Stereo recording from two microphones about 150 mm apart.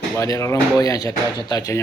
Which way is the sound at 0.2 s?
20° left (ahead or behind).